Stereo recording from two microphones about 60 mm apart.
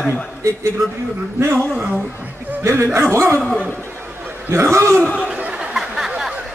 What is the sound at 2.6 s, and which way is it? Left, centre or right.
Speech, right.